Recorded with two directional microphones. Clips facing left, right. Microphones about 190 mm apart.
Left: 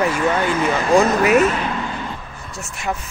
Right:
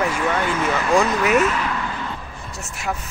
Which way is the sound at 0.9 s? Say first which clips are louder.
Left 4 dB; 40° left (ahead or behind).